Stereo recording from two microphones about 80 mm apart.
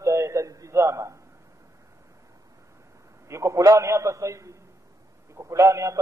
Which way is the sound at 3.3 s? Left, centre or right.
Right.